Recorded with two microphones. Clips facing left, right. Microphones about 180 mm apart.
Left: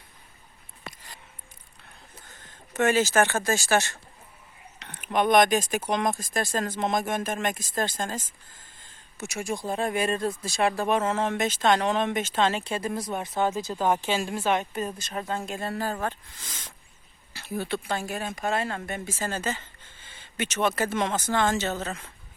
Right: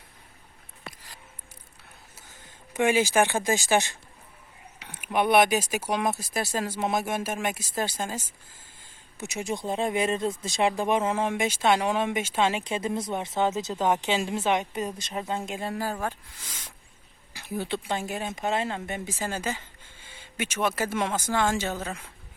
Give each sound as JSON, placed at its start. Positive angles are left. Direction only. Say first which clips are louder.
{"t": 2.1, "sound": "speech", "louder": "left 1 dB", "side_deg": -10}
{"t": 8.8, "sound": "a sound", "louder": "even", "side_deg": -10}
{"t": 9.6, "sound": "speech", "louder": "right 1 dB", "side_deg": -20}